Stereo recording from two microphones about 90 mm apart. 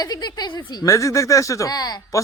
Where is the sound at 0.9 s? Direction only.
35° left (ahead or behind).